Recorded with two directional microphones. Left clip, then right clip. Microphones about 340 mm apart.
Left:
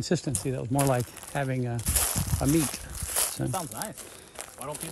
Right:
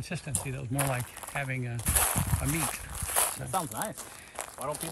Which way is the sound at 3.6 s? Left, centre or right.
Centre.